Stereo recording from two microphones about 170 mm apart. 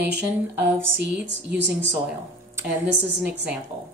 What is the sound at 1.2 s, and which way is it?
Speech, 90° right.